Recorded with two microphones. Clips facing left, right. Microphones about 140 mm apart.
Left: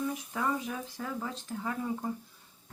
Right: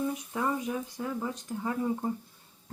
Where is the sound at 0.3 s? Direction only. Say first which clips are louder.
Right 2 dB; 20° right (ahead or behind).